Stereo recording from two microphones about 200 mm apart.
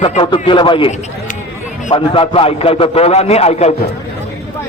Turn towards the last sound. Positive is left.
turn(degrees=30)  # may be behind; listen again after turning